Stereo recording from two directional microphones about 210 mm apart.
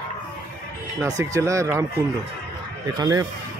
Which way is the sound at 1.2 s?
15° right (ahead or behind).